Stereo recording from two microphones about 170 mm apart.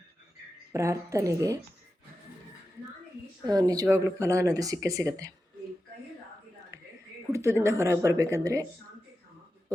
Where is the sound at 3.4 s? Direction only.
25° right (ahead or behind).